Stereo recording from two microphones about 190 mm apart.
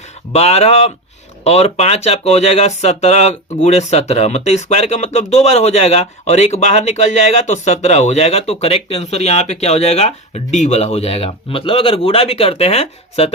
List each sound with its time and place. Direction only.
0.3 s speech: 35° left (ahead or behind)